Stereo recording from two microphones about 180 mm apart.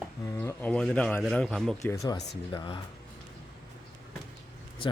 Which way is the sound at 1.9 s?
20° left (ahead or behind).